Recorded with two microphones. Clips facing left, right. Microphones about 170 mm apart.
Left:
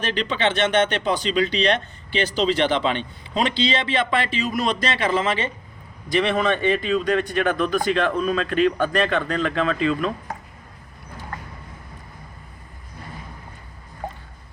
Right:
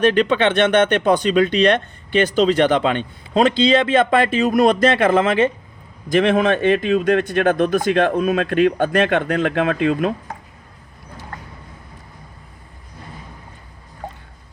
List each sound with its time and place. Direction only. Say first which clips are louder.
0.0 s a man's voice: right 8 dB; 55° right (ahead or behind)